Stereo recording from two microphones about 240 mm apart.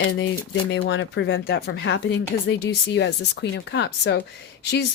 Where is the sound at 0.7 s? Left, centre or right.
Left.